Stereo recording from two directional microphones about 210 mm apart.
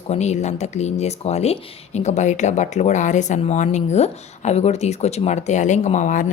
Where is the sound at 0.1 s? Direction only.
30° left (ahead or behind).